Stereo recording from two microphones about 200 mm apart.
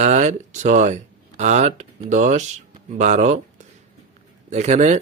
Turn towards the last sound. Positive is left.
turn(degrees=-35)  # may be behind; listen again after turning